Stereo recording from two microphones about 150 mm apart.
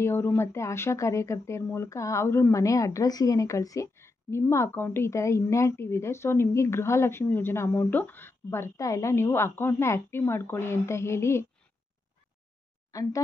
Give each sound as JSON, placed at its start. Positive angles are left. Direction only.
{"t": 0.0, "sound": "speech", "side_deg": 15}
{"t": 12.9, "sound": "speech", "side_deg": 20}